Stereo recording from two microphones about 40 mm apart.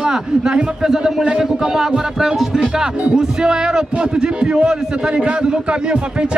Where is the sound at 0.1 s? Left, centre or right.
Centre.